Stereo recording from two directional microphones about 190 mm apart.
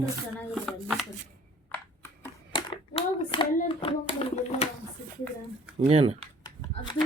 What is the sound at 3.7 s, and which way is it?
Speech, 30° left (ahead or behind).